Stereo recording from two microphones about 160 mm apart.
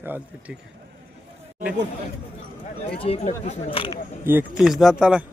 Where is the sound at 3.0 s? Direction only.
40° left (ahead or behind).